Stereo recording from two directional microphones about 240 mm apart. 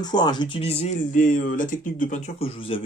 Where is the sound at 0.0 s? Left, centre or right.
Centre.